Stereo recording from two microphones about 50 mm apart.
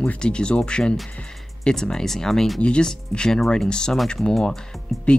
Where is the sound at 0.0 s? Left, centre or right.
Centre.